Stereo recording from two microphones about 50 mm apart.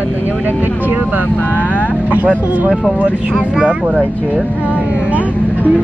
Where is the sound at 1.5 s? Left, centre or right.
Right.